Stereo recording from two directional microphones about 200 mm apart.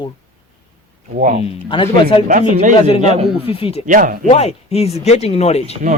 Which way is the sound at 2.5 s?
40° right (ahead or behind).